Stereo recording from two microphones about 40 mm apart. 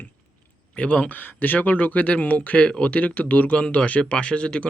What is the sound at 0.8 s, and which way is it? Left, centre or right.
Speech, left.